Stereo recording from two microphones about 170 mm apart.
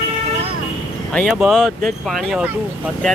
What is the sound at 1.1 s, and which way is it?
Speech, centre (ahead or behind).